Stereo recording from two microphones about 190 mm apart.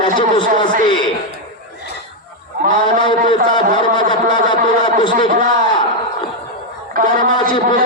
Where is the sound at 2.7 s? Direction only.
25° left (ahead or behind).